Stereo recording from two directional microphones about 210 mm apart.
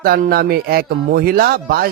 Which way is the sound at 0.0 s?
45° right (ahead or behind).